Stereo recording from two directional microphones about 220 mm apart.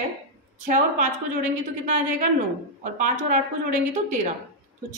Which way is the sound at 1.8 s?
35° right (ahead or behind).